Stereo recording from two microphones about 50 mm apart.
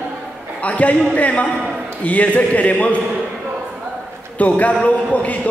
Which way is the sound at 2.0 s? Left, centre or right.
Left.